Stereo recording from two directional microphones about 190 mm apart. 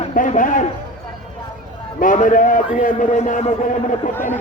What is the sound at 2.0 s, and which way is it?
A man's voice, 45° left (ahead or behind).